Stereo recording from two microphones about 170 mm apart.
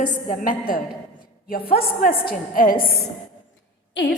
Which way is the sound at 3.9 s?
90° left.